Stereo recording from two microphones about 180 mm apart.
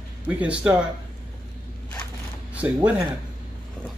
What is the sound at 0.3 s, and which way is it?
Speech, 5° right (ahead or behind).